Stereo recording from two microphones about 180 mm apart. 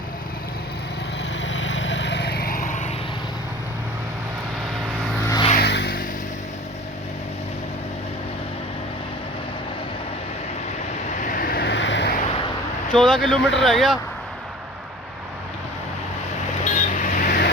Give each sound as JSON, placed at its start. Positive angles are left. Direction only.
{"t": 1.4, "sound": "vehicle", "side_deg": 90}
{"t": 5.2, "sound": "vehicle", "side_deg": 20}
{"t": 5.5, "sound": "vehicle", "side_deg": 70}
{"t": 11.2, "sound": "vehicle", "side_deg": 50}
{"t": 12.1, "sound": "vehicle", "side_deg": 35}
{"t": 13.0, "sound": "speech", "side_deg": 0}
{"t": 16.6, "sound": "vehicle", "side_deg": 40}